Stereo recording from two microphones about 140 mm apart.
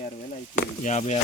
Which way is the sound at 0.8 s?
55° left (ahead or behind).